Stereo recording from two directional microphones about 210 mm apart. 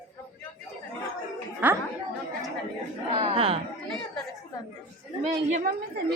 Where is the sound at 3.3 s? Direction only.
30° right (ahead or behind).